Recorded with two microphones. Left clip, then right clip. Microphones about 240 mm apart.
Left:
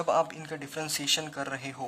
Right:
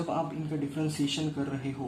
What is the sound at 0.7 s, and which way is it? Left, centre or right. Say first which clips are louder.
Speech: left 6 dB; left.